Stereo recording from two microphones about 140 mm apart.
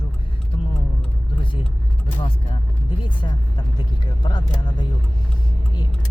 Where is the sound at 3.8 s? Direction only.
30° left (ahead or behind).